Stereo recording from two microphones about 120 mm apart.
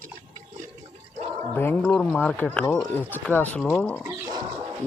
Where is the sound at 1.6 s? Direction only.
20° left (ahead or behind).